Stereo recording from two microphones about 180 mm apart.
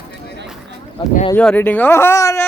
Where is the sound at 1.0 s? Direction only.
25° left (ahead or behind).